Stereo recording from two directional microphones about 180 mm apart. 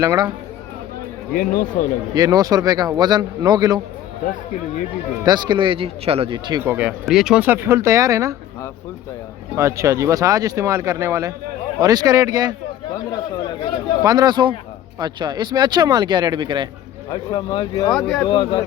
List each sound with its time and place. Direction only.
0.0 s speech: 15° right (ahead or behind)
1.3 s speech: 50° left (ahead or behind)
2.1 s speech: 20° right (ahead or behind)
5.2 s speech: 25° right (ahead or behind)
6.7 s speech: 10° right (ahead or behind)
9.6 s speech: 15° right (ahead or behind)
12.9 s speech: 25° left (ahead or behind)
14.0 s speech: 20° right (ahead or behind)
17.1 s speech: 25° left (ahead or behind)